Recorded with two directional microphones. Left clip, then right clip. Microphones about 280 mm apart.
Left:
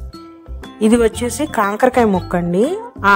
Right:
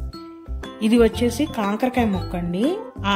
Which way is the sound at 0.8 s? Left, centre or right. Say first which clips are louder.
Left 3 dB; centre.